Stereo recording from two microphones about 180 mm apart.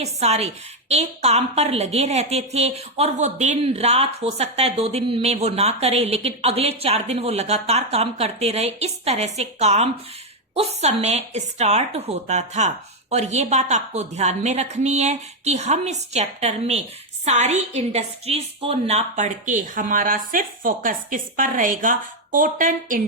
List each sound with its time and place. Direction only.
0.0 s a woman's voice: 35° right (ahead or behind)